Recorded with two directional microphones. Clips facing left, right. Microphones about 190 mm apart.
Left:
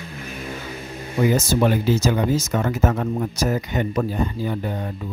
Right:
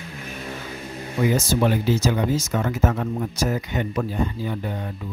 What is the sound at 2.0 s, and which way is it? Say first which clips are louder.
Speech: left 2 dB; 45° left (ahead or behind).